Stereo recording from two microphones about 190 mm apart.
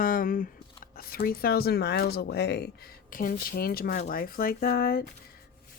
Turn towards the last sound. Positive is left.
turn(degrees=50)  # may be behind; listen again after turning